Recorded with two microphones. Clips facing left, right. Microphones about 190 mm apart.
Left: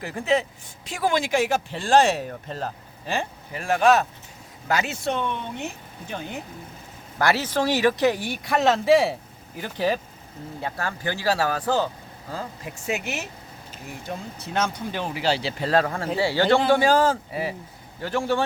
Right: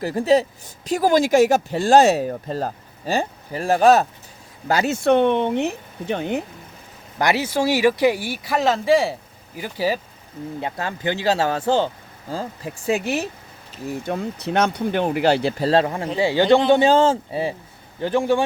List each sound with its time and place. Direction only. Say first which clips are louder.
0.0 s speech: right 6 dB; 35° right (ahead or behind)
5.0 s speech: right 11 dB; 65° right (ahead or behind)
7.2 s speech: right 2 dB; 15° right (ahead or behind)
10.6 s speech: right 2 dB; 20° right (ahead or behind)
14.1 s speech: right 6 dB; 65° right (ahead or behind)
15.6 s speech: right 1 dB; 25° right (ahead or behind)